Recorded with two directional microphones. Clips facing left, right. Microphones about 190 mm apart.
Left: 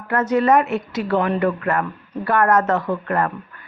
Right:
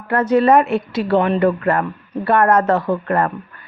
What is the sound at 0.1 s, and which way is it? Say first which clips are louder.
A woman's voice: right 3 dB; 30° right (ahead or behind).